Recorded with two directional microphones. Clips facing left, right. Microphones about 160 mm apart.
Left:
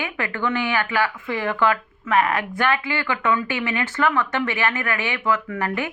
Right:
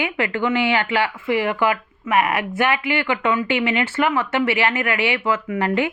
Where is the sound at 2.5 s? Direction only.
20° right (ahead or behind).